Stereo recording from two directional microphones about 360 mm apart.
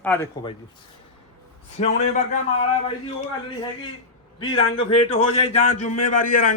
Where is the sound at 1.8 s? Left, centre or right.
Centre.